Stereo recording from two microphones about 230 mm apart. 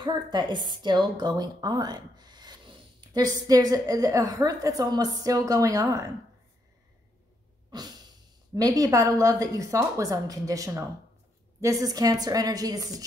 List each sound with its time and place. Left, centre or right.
0.0 s a woman's voice: centre
7.7 s a sound: centre
8.5 s a woman's voice: centre